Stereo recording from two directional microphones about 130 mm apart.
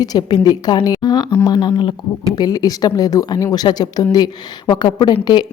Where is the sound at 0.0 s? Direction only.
30° left (ahead or behind).